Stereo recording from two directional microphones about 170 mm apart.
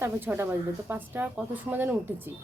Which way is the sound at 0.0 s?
15° right (ahead or behind).